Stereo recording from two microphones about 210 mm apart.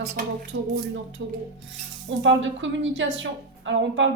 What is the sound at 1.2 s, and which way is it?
A woman's voice, 65° right (ahead or behind).